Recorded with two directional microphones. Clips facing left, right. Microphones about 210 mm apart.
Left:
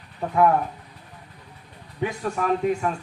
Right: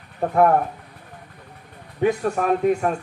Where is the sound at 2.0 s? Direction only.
50° right (ahead or behind).